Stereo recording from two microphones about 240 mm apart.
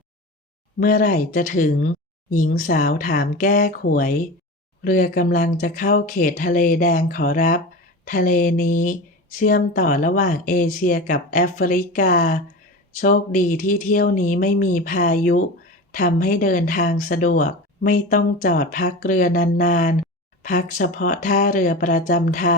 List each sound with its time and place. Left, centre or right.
0.8 s speech: left